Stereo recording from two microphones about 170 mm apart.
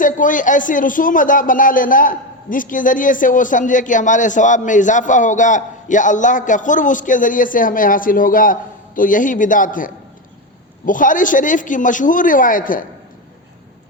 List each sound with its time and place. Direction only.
0.0 s speech: 50° left (ahead or behind)